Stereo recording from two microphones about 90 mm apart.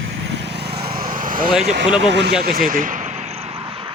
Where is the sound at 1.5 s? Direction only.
5° right (ahead or behind).